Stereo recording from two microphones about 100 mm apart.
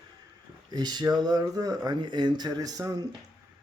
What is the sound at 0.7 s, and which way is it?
Speech, 45° right (ahead or behind).